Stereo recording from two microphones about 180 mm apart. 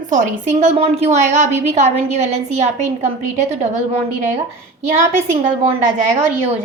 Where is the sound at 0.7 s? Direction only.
35° right (ahead or behind).